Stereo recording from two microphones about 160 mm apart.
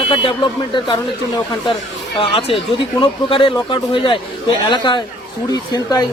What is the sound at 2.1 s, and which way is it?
Speech, 35° left (ahead or behind).